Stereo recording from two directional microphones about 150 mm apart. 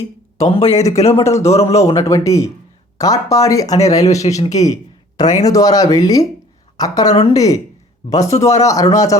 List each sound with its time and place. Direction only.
0.3 s speech: 45° left (ahead or behind)
0.7 s speech: 20° left (ahead or behind)
4.5 s a sound: 25° left (ahead or behind)
5.5 s speech: 25° left (ahead or behind)
7.1 s speech: 45° left (ahead or behind)
7.3 s speech: 25° left (ahead or behind)